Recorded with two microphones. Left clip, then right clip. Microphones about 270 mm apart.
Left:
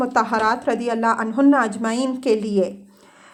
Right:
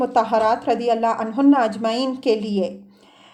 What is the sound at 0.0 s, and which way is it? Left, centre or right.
A woman's voice, left.